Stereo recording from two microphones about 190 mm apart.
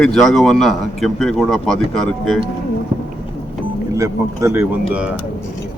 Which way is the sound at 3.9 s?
15° right (ahead or behind).